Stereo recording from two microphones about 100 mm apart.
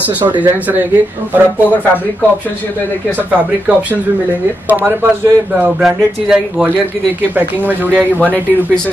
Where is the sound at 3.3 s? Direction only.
15° right (ahead or behind).